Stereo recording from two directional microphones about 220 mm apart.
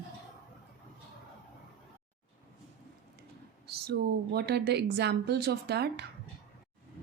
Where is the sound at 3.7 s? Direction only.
45° right (ahead or behind).